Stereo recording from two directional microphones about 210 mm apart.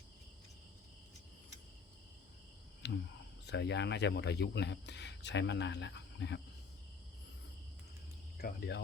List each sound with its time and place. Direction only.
2.8 s a sound: 55° left (ahead or behind)
3.4 s speech: 55° left (ahead or behind)
8.4 s speech: 50° left (ahead or behind)